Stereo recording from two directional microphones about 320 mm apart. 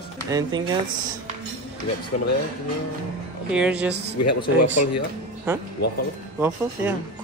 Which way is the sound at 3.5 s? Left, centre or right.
Centre.